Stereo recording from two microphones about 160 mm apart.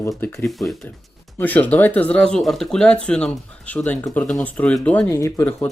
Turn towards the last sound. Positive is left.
turn(degrees=15)  # may be behind; listen again after turning